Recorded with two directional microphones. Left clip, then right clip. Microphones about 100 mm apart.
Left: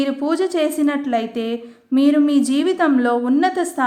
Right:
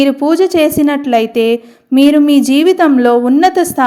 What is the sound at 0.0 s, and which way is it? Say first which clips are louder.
A woman's voice: right 9 dB; 65° right (ahead or behind).